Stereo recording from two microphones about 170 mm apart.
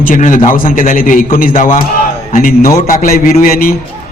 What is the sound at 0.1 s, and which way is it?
A man's voice, 50° left (ahead or behind).